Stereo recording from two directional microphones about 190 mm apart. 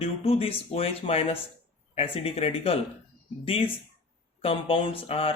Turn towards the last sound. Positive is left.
turn(degrees=30)  # may be behind; listen again after turning